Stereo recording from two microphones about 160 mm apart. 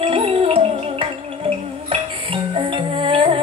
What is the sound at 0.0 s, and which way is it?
Music, 35° right (ahead or behind).